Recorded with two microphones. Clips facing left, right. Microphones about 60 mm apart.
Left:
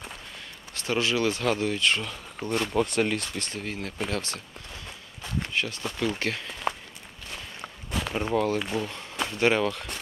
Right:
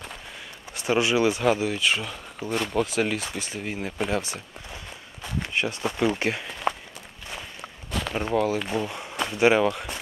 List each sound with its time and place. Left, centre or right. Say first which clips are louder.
0.7 s speech: right 4 dB; centre
5.2 s walk: right 1 dB; centre
5.5 s speech: right 6 dB; centre
7.9 s a sound: right 1 dB; centre
8.2 s speech: right 1 dB; centre